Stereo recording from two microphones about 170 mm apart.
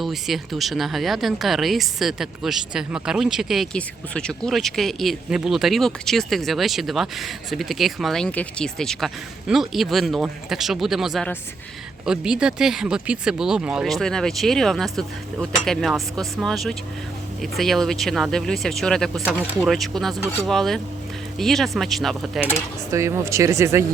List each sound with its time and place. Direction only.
0.0 s speech: centre (ahead or behind)
22.9 s speech: 15° right (ahead or behind)